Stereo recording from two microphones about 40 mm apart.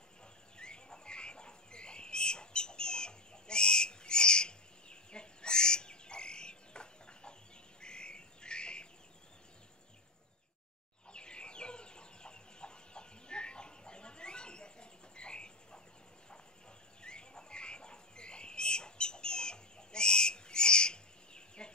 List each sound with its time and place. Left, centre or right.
0.6 s bird: left
7.8 s squawk: left
11.1 s chicken: left
17.0 s bird: left